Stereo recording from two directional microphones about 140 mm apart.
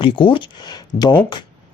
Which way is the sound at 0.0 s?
35° left (ahead or behind).